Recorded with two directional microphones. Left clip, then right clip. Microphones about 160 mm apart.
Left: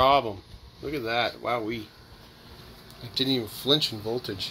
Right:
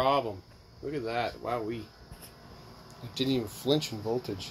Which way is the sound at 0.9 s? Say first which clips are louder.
Left 5 dB; 15° left (ahead or behind).